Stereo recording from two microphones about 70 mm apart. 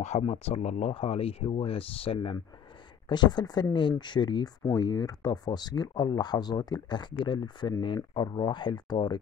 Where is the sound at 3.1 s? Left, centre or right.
Left.